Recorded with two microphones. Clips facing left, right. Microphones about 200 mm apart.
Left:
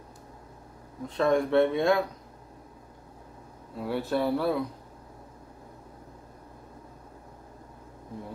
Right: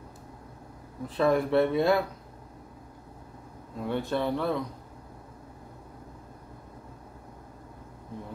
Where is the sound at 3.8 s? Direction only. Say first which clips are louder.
Left 1 dB; 5° left (ahead or behind).